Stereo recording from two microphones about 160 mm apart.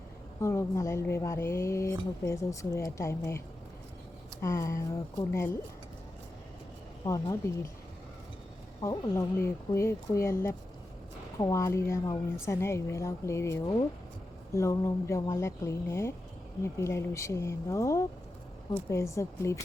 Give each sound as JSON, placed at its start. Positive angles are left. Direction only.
{"t": 0.4, "sound": "a woman's voice", "side_deg": 20}
{"t": 7.0, "sound": "speech", "side_deg": 20}
{"t": 8.8, "sound": "a woman's voice", "side_deg": 20}
{"t": 11.3, "sound": "a woman's voice", "side_deg": 20}